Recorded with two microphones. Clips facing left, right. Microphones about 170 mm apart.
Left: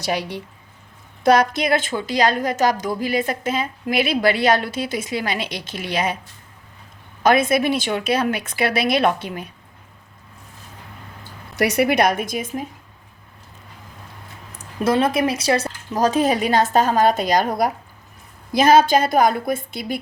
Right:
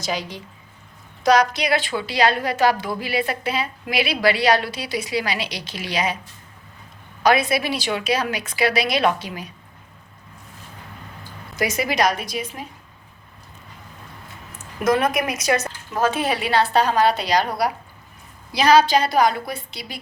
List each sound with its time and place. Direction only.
0.0 s a woman's voice: 65° left (ahead or behind)
7.2 s a woman's voice: 50° left (ahead or behind)
11.5 s a woman's voice: 65° left (ahead or behind); by 12.6 s 45° left (ahead or behind)
14.6 s a woman's voice: 30° left (ahead or behind); by 20.0 s 50° left (ahead or behind)